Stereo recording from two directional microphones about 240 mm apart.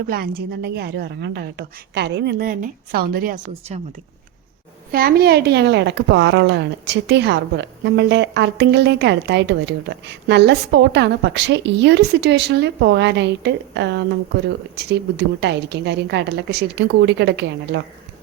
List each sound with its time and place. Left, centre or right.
0.0 s a woman's voice: right
3.6 s speech: right
4.9 s a woman's voice: right
15.4 s a woman's voice: right